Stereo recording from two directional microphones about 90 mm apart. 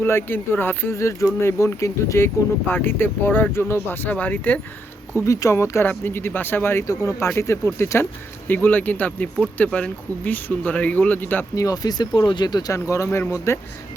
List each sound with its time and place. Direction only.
0.0 s speech: 25° left (ahead or behind)
5.1 s speech: 35° left (ahead or behind)
6.8 s speech: 35° left (ahead or behind)
8.4 s speech: 20° left (ahead or behind)
11.5 s speech: 40° left (ahead or behind)
12.7 s speech: 35° left (ahead or behind)